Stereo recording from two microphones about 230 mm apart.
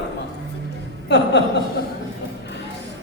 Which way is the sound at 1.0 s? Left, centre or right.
Left.